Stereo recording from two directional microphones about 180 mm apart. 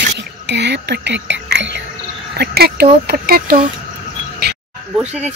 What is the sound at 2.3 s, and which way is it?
Speech, 60° right (ahead or behind).